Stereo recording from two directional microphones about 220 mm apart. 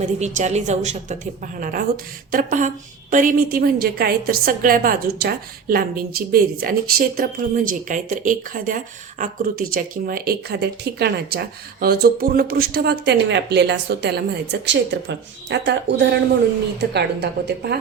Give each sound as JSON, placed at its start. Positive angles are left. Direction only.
{"t": 0.0, "sound": "a woman's voice", "side_deg": -30}